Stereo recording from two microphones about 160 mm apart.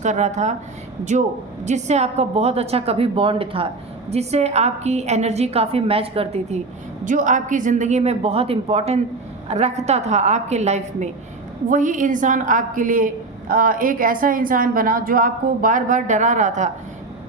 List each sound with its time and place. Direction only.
0.0 s a woman's voice: 45° right (ahead or behind)
7.0 s a woman's voice: 55° right (ahead or behind)